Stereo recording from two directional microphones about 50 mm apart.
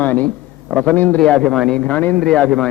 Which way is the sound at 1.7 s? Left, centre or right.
Left.